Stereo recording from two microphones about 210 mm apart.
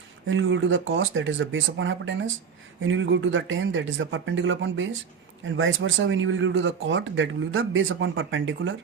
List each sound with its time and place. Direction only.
0.3 s speech: 70° right (ahead or behind)